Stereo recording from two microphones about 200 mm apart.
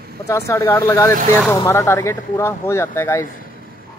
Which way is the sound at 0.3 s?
15° left (ahead or behind).